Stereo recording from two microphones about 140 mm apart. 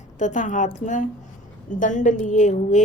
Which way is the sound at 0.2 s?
65° left (ahead or behind).